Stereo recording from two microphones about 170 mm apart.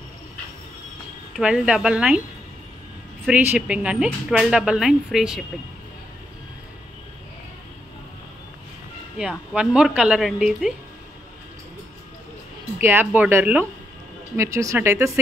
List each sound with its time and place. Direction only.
1.3 s speech: 5° right (ahead or behind)
3.3 s speech: 5° right (ahead or behind)
9.2 s speech: 5° right (ahead or behind)
12.8 s speech: 10° right (ahead or behind)